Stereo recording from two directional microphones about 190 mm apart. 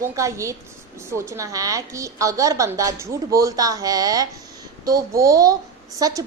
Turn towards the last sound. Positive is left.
turn(degrees=-20)  # may be behind; listen again after turning